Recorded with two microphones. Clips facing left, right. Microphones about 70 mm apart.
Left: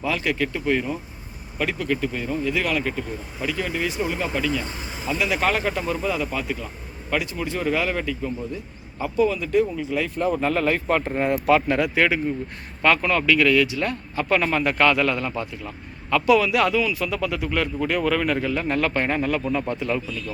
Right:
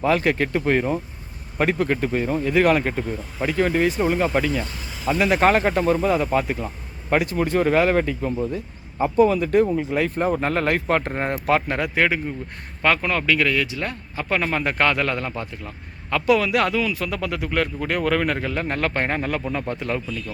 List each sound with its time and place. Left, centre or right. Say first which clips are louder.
0.0 s a man's voice: right 4 dB; right
4.6 s vehicle: left 1 dB; left
5.0 s a man's voice: right 5 dB; right
11.1 s a man's voice: left 2 dB; right